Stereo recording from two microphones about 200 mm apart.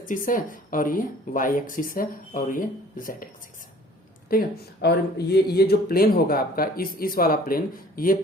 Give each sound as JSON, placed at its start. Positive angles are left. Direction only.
{"t": 0.0, "sound": "speech", "side_deg": 40}
{"t": 4.3, "sound": "speech", "side_deg": 50}